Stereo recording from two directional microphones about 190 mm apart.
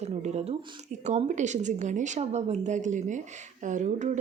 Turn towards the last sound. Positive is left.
turn(degrees=-40)  # may be behind; listen again after turning